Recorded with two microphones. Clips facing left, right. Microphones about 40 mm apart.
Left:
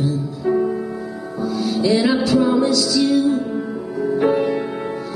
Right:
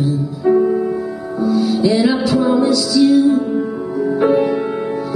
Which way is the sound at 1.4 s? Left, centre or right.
Right.